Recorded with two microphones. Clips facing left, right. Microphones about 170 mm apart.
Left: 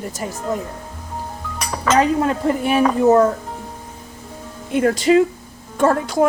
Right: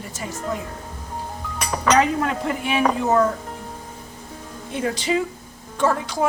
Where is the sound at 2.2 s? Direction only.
40° left (ahead or behind).